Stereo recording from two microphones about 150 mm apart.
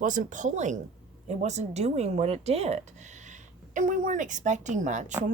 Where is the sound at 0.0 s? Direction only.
60° right (ahead or behind).